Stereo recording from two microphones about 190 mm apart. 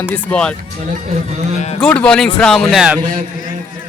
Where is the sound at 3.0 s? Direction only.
45° right (ahead or behind).